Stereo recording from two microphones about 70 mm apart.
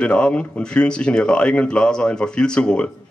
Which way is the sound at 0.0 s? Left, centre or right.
Centre.